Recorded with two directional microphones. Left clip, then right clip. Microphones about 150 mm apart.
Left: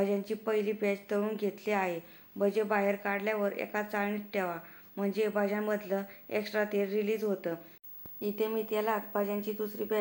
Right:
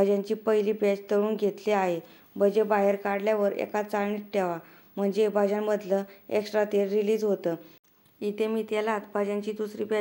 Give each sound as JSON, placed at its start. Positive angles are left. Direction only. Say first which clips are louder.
{"t": 0.0, "sound": "speech", "louder": "right 7 dB", "side_deg": -40}